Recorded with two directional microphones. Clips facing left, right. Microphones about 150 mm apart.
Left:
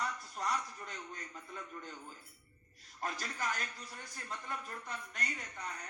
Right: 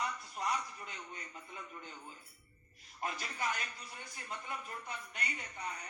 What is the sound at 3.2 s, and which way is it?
Speech, 40° left (ahead or behind).